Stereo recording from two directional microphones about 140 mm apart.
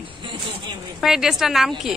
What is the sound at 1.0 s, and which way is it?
Speech, 5° right (ahead or behind).